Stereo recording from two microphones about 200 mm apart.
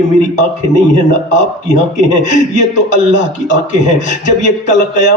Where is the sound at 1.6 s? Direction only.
35° left (ahead or behind).